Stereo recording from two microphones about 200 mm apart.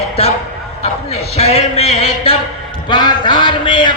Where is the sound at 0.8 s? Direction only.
30° left (ahead or behind).